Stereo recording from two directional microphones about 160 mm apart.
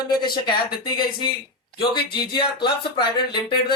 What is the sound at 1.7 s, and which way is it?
A woman's voice, 30° left (ahead or behind).